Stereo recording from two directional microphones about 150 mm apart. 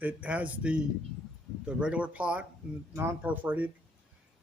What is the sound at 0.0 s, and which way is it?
Speech, 10° right (ahead or behind).